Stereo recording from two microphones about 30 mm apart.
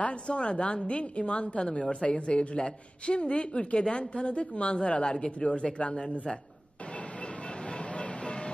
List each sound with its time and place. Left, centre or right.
0.0 s a woman's voice: left
5.1 s a woman's voice: left
7.9 s music: left